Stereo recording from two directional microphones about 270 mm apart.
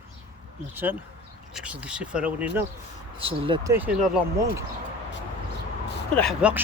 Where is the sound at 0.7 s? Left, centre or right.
Centre.